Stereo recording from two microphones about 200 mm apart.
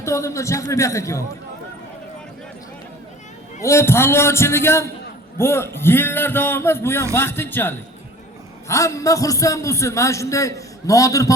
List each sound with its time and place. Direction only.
0.0 s a man's voice: 15° left (ahead or behind)
3.6 s a man's voice: 15° left (ahead or behind)